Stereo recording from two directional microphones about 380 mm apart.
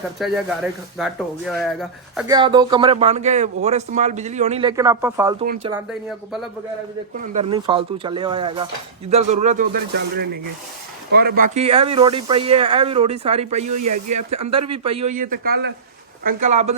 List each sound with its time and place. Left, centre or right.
0.2 s speech: centre
7.2 s speech: centre
11.3 s speech: centre
13.8 s speech: right
14.3 s speech: centre